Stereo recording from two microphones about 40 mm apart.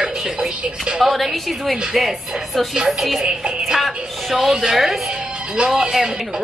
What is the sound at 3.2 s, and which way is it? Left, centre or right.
A woman's voice, centre.